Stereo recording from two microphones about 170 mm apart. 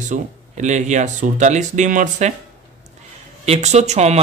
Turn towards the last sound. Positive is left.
turn(degrees=-40)  # may be behind; listen again after turning